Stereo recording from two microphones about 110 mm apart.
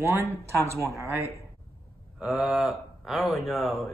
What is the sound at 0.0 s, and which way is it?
Speech, 20° right (ahead or behind).